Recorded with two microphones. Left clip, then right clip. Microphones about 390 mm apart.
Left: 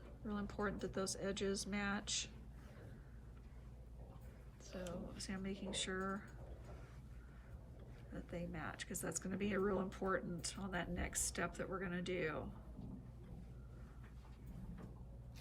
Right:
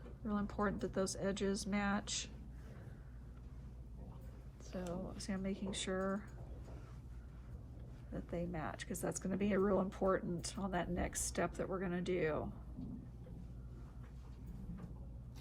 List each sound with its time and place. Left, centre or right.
0.3 s speech: centre
4.7 s speech: centre
8.1 s speech: centre